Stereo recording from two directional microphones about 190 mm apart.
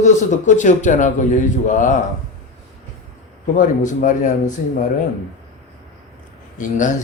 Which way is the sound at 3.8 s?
40° left (ahead or behind).